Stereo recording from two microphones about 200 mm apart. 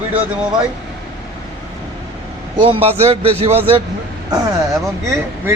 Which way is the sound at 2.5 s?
25° right (ahead or behind).